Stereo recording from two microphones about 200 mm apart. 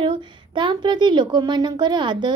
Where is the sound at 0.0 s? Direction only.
25° right (ahead or behind).